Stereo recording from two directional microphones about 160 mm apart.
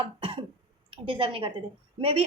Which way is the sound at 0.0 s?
35° right (ahead or behind).